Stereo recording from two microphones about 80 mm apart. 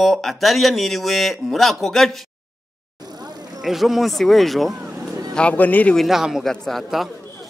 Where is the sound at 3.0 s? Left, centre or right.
Right.